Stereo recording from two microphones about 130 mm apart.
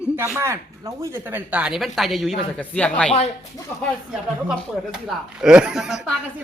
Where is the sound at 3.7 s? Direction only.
20° left (ahead or behind).